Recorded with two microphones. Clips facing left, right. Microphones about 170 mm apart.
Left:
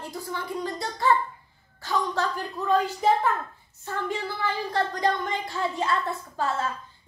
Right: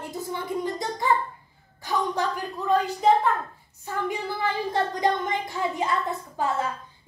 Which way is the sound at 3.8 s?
15° right (ahead or behind).